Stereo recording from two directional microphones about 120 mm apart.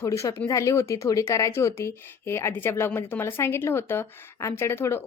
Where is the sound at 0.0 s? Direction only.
25° left (ahead or behind).